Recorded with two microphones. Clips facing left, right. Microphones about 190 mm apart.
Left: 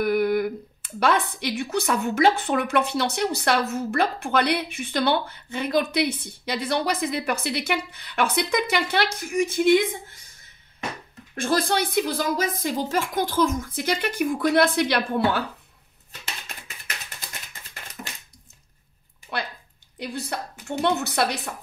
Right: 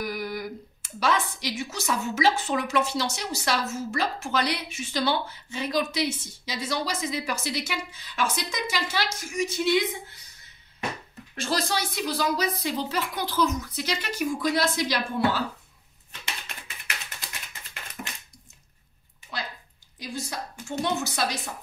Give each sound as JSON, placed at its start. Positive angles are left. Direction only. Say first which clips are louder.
{"t": 0.0, "sound": "speech", "louder": "left 10 dB", "side_deg": 60}
{"t": 11.3, "sound": "a woman's voice", "louder": "left 5 dB", "side_deg": 55}
{"t": 20.0, "sound": "speech", "louder": "left 3 dB", "side_deg": 60}